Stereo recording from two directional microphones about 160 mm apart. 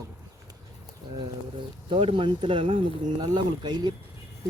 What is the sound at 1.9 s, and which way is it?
Speech, 35° right (ahead or behind).